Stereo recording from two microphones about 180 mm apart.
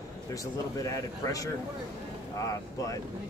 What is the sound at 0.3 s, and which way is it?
Speech, 20° left (ahead or behind).